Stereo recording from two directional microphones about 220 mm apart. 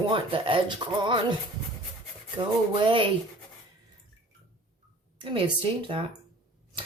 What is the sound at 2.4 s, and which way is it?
Speech, 20° right (ahead or behind).